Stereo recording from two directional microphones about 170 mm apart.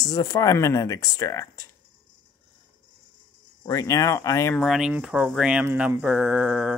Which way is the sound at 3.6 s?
20° left (ahead or behind).